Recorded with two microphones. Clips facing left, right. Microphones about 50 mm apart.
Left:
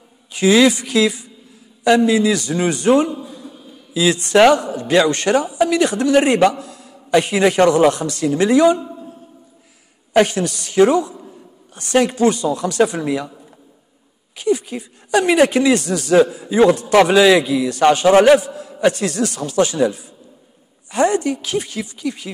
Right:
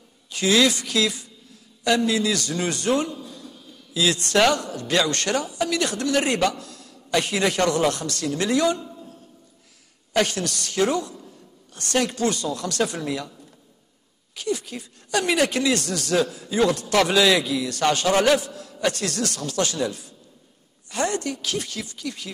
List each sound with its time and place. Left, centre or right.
0.3 s a woman's voice: centre